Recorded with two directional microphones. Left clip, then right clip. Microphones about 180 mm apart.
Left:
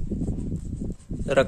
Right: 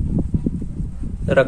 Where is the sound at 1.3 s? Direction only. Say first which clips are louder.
Right 5 dB; 35° left (ahead or behind).